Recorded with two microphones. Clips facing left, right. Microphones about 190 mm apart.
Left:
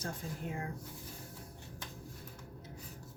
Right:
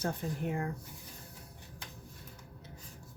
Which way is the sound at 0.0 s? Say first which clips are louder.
Right 6 dB; 60° right (ahead or behind).